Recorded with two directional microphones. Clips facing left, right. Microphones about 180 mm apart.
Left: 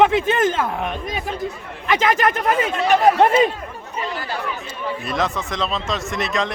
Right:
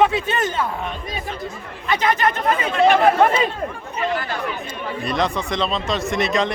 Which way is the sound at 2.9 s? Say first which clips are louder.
Left 1 dB; 40° left (ahead or behind).